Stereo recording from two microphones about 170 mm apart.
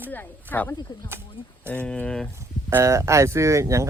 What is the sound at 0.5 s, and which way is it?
Speech, 10° left (ahead or behind).